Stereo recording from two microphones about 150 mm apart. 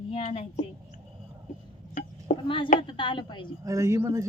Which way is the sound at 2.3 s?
55° left (ahead or behind).